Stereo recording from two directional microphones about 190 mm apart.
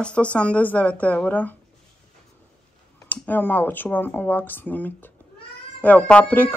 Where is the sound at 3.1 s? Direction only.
10° left (ahead or behind).